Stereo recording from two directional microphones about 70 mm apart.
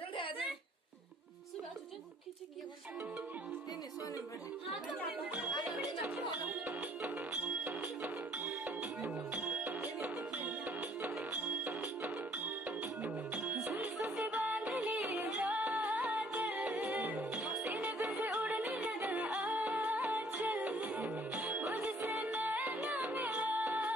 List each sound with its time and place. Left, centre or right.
7.6 s music: right
8.4 s music: centre
9.6 s music: right
11.1 s music: centre
11.6 s music: right
13.0 s music: centre
13.7 s music: right
14.8 s music: centre
15.4 s music: right
17.3 s music: centre
17.7 s music: right